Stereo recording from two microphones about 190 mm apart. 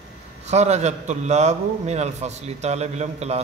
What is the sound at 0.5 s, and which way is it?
A man's voice, 35° right (ahead or behind).